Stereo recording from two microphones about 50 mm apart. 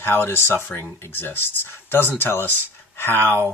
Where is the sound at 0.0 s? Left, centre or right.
Left.